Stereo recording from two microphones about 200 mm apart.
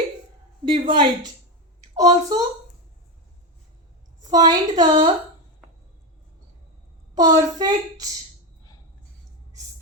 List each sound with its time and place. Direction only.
0.6 s a woman's voice: 25° right (ahead or behind)
4.2 s a sound: 20° right (ahead or behind)
4.8 s a woman's voice: 25° right (ahead or behind)
7.2 s a woman's voice: 20° right (ahead or behind)